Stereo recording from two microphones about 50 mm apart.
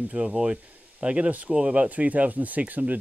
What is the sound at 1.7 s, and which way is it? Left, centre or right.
Speech, right.